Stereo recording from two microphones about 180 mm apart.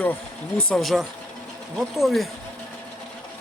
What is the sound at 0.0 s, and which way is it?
Speech, 10° left (ahead or behind).